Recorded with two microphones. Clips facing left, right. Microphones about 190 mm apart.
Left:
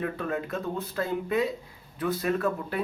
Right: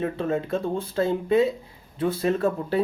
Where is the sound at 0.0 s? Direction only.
25° right (ahead or behind).